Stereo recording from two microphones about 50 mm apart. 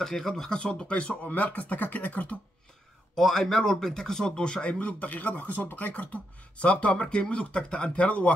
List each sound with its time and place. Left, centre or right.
0.0 s speech: centre; by 2.3 s left
3.2 s speech: centre; by 6.0 s left
6.6 s speech: left